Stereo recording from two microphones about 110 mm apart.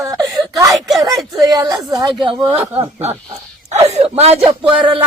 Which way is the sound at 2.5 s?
70° right (ahead or behind).